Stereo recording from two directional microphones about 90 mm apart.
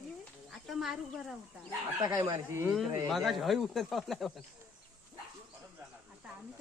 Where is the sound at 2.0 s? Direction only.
40° right (ahead or behind).